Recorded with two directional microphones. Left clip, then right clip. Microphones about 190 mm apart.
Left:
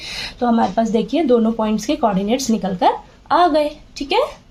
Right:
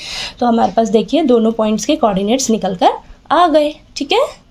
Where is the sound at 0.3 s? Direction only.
45° right (ahead or behind).